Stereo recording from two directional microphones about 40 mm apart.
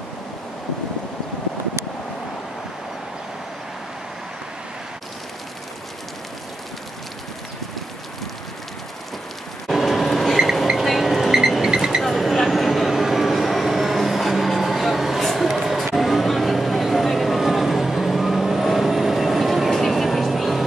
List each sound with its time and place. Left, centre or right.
9.7 s train: centre
10.3 s a sound: centre
10.8 s vehicle: centre
12.0 s vehicle: centre
15.1 s music: centre